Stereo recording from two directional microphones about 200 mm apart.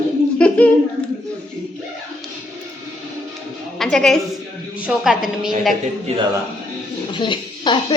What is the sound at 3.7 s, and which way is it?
A woman's voice, centre (ahead or behind).